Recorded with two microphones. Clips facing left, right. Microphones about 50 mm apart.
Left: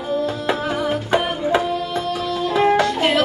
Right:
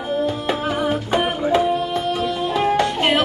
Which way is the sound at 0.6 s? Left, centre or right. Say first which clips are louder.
Right 1 dB; right.